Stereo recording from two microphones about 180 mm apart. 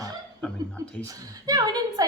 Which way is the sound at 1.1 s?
20° right (ahead or behind).